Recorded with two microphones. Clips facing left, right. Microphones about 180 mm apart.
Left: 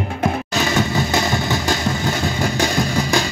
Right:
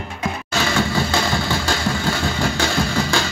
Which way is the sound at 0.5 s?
20° left (ahead or behind).